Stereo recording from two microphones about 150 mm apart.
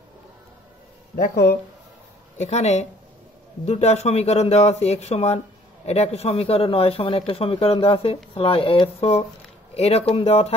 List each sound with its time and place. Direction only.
1.1 s speech: 70° left (ahead or behind)
2.3 s speech: 50° left (ahead or behind)